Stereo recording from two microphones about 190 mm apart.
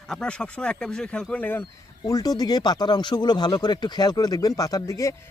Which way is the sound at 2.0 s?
20° left (ahead or behind).